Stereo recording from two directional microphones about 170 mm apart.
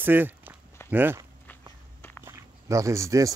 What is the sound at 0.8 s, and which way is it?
Speech, 10° right (ahead or behind).